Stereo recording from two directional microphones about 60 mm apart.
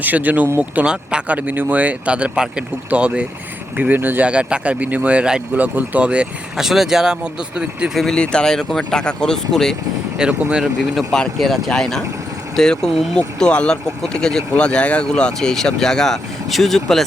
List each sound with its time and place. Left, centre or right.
0.0 s speech: right
1.4 s speech: right
3.8 s speech: right
4.3 s speech: centre
6.6 s speech: centre
8.1 s speech: centre
10.2 s speech: centre
10.6 s speech: centre